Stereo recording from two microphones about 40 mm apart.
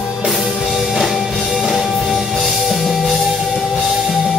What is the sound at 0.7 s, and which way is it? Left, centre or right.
Music, centre.